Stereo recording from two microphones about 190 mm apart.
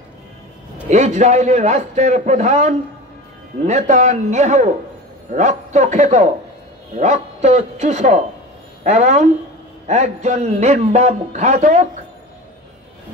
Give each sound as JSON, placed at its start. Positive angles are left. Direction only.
{"t": 0.8, "sound": "a man's voice", "side_deg": -35}